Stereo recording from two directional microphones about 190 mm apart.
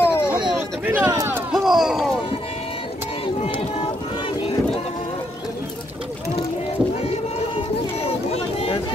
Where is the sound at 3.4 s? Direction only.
25° left (ahead or behind).